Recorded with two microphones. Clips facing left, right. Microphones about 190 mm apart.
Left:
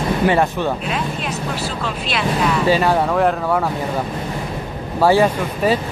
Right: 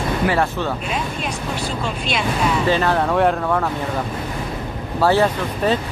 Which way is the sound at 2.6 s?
10° left (ahead or behind).